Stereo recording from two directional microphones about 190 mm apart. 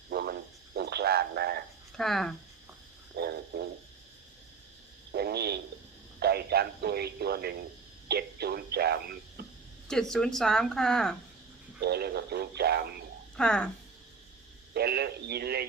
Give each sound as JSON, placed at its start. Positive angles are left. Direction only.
{"t": 0.1, "sound": "frog", "side_deg": -55}
{"t": 2.0, "sound": "speech", "side_deg": 0}
{"t": 3.2, "sound": "frog", "side_deg": -60}
{"t": 5.1, "sound": "frog", "side_deg": -55}
{"t": 6.1, "sound": "radio", "side_deg": -55}
{"t": 9.9, "sound": "speech", "side_deg": 5}
{"t": 11.8, "sound": "a sound", "side_deg": -55}
{"t": 13.3, "sound": "speech", "side_deg": 5}
{"t": 14.7, "sound": "radio", "side_deg": -55}